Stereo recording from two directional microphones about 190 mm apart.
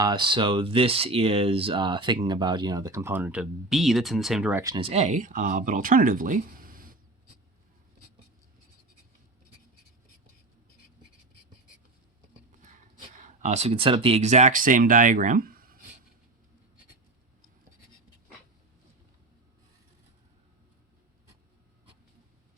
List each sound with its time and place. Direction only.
0.0 s speech: 25° right (ahead or behind); by 4.6 s 5° right (ahead or behind)
4.6 s speech: 25° right (ahead or behind); by 7.0 s 50° right (ahead or behind)
13.1 s speech: 40° right (ahead or behind)